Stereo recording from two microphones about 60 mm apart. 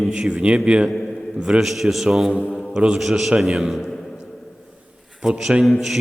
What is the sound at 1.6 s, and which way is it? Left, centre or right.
Speech, centre.